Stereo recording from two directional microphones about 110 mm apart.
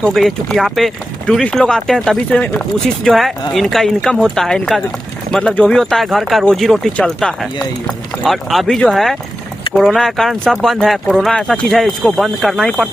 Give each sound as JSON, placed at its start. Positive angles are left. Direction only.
{"t": 0.1, "sound": "speech", "side_deg": 0}
{"t": 2.6, "sound": "speech", "side_deg": 0}